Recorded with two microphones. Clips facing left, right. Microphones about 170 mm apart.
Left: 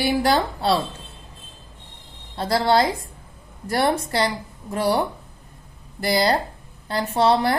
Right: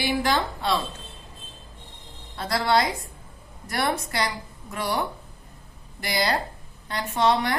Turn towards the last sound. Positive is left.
turn(degrees=35)  # may be behind; listen again after turning